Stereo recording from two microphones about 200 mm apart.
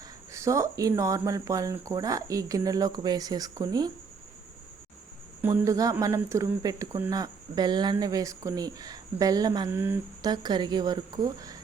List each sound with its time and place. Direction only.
0.3 s speech: 15° right (ahead or behind)
5.4 s a woman's voice: 15° right (ahead or behind)